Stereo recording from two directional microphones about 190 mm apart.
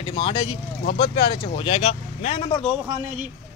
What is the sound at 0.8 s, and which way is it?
Speech, 65° left (ahead or behind).